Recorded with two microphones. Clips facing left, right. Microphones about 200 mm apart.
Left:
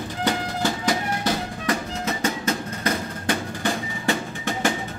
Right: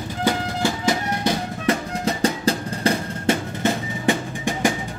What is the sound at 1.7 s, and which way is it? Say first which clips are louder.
Music: right 4 dB; 35° right (ahead or behind).